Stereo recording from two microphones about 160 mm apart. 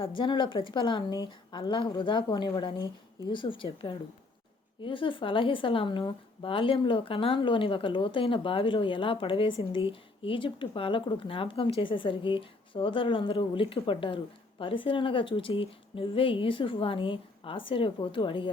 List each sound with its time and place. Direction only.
0.0 s a woman's voice: 30° left (ahead or behind)